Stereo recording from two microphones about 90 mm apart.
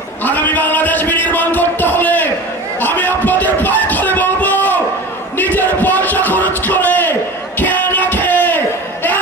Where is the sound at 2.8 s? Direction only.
20° left (ahead or behind).